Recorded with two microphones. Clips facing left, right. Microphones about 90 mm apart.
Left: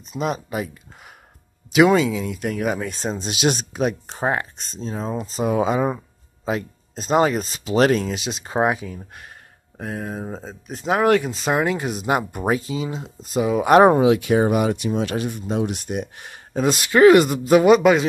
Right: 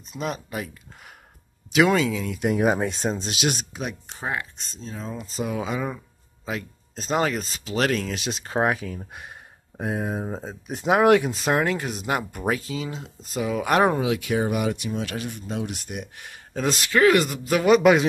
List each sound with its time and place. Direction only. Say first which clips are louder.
0.1 s speech: left 5 dB; 15° left (ahead or behind)
2.4 s speech: right 4 dB; 25° right (ahead or behind)
3.2 s speech: left 5 dB; 20° left (ahead or behind)
4.2 s speech: left 7 dB; 40° left (ahead or behind); by 8.1 s 25° left (ahead or behind)
8.1 s speech: left 2 dB; 5° left (ahead or behind)
9.8 s speech: right 2 dB; 10° right (ahead or behind); by 16.3 s 30° left (ahead or behind)
16.5 s speech: left 5 dB; 10° left (ahead or behind)
16.9 s speech: left 7 dB; 20° left (ahead or behind)
17.6 s a man's voice: right 1 dB; centre (ahead or behind)